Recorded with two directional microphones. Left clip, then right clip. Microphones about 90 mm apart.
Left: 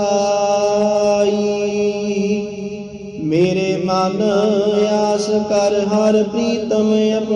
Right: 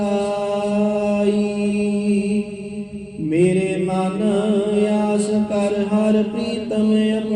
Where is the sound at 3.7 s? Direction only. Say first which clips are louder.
Left 5 dB; 15° left (ahead or behind).